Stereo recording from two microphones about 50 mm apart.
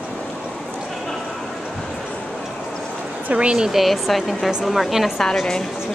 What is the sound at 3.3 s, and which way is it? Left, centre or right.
Speech, right.